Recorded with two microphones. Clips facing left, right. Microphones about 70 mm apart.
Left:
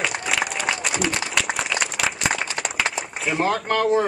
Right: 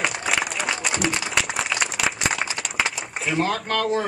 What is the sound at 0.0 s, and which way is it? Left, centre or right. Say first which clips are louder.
Applause: even; centre.